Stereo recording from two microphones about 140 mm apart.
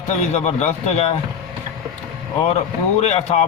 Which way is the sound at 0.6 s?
50° left (ahead or behind).